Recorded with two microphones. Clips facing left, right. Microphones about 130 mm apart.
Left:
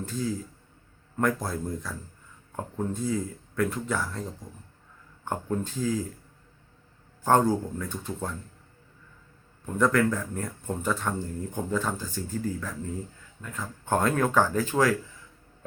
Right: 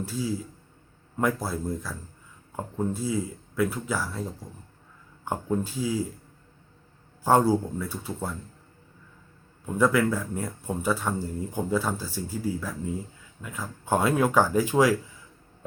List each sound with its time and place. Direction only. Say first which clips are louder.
0.0 s speech: right 1 dB; 5° right (ahead or behind)
7.3 s speech: right 1 dB; 10° right (ahead or behind)
9.6 s speech: right 1 dB; 5° right (ahead or behind)